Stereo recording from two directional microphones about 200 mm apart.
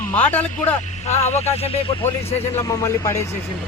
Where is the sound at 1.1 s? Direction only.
30° left (ahead or behind).